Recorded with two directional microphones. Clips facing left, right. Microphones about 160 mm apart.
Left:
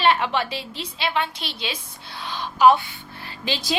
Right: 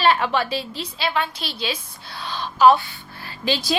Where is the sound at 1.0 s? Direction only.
25° left (ahead or behind).